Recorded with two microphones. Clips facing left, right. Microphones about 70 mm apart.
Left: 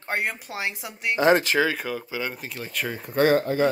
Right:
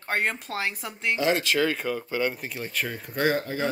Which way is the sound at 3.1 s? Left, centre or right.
Left.